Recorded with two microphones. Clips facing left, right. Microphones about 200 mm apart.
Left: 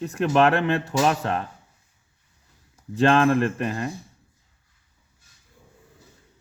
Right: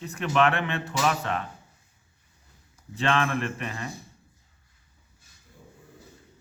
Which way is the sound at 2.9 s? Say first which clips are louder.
Left 8 dB; 45° left (ahead or behind).